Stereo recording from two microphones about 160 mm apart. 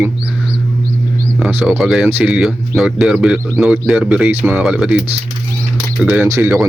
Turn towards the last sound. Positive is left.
turn(degrees=-15)  # may be behind; listen again after turning